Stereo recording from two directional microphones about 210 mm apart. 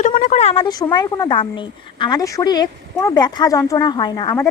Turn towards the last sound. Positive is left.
turn(degrees=20)  # may be behind; listen again after turning